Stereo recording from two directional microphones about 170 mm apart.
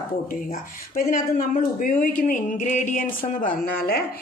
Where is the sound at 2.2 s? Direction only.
50° left (ahead or behind).